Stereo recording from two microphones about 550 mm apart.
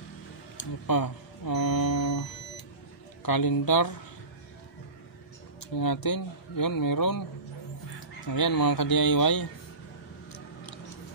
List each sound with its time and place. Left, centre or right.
0.6 s a man's voice: left
5.8 s a man's voice: left
8.3 s a man's voice: left